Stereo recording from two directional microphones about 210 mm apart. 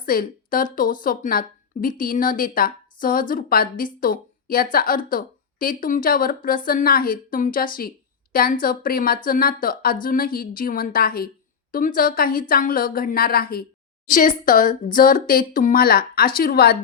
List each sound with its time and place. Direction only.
0.0 s speech: 45° left (ahead or behind)